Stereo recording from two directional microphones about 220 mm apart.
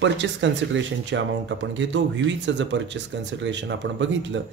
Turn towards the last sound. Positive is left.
turn(degrees=-55)  # may be behind; listen again after turning